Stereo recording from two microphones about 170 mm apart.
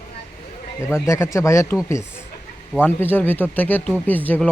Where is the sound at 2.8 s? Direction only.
10° left (ahead or behind).